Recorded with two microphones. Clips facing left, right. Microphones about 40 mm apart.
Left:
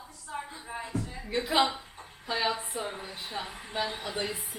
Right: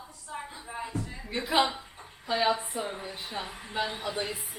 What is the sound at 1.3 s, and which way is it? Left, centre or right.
Speech, centre.